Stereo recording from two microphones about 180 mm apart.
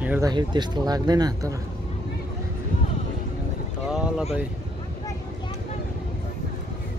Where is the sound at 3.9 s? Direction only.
5° right (ahead or behind).